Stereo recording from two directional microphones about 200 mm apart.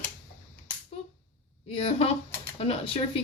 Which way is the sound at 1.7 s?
30° left (ahead or behind).